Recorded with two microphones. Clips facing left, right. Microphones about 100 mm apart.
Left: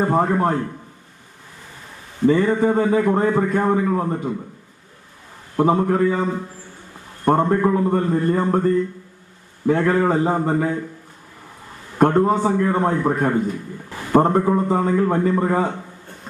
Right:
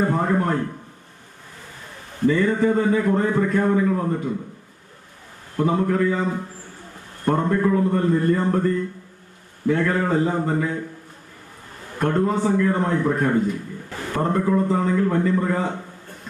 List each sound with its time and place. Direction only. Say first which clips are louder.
0.0 s a man's voice: left 3 dB; 40° left (ahead or behind)
2.2 s a man's voice: left 2 dB; 35° left (ahead or behind)
5.5 s a man's voice: left 3 dB; 40° left (ahead or behind)
7.3 s a man's voice: left 3 dB; 35° left (ahead or behind)
11.9 s a man's voice: left 5 dB; 35° left (ahead or behind)